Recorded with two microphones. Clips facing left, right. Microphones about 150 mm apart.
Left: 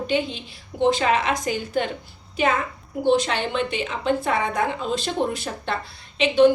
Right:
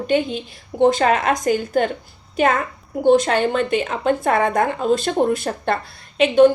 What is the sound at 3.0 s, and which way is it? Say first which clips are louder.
A woman's voice: right 6 dB; 50° right (ahead or behind).